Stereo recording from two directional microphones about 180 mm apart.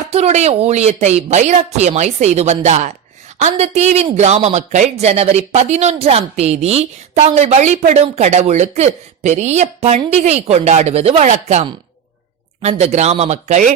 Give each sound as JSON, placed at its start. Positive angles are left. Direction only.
{"t": 0.1, "sound": "speech", "side_deg": -35}